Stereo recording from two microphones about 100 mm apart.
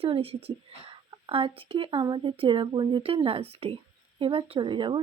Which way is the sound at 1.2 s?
60° right (ahead or behind).